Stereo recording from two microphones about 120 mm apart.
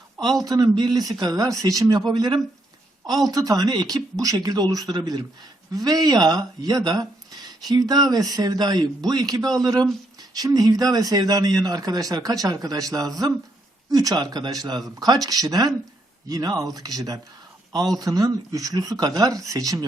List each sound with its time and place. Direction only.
0.4 s speech: 35° right (ahead or behind)